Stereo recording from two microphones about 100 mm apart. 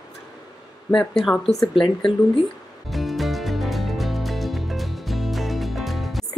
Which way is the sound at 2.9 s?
Centre (ahead or behind).